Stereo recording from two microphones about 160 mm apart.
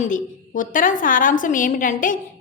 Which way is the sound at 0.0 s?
55° left (ahead or behind).